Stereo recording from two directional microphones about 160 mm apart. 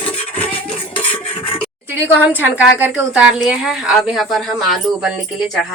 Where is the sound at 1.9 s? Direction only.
10° right (ahead or behind).